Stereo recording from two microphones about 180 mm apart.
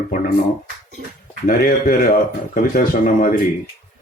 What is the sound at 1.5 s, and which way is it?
Speech, 50° left (ahead or behind).